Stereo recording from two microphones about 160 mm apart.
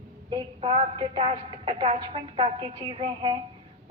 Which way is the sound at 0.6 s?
35° right (ahead or behind).